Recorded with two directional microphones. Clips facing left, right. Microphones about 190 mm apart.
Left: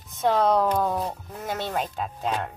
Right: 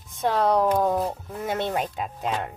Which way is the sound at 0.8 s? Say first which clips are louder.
Right 3 dB; 35° right (ahead or behind).